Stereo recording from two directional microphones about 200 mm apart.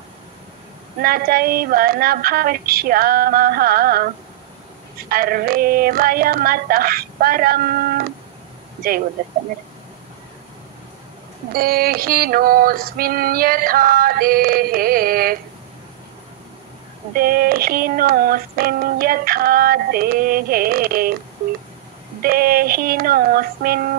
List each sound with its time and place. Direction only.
1.0 s speech: 45° right (ahead or behind)
5.1 s speech: 45° right (ahead or behind)
11.5 s speech: 45° right (ahead or behind)
17.1 s speech: 45° right (ahead or behind)
22.2 s speech: 50° right (ahead or behind)